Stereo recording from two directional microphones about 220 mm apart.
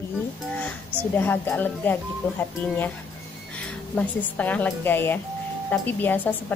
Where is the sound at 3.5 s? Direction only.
5° left (ahead or behind).